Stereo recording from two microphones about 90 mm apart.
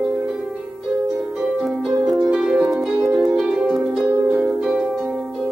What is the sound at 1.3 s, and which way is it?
Harp, 5° right (ahead or behind).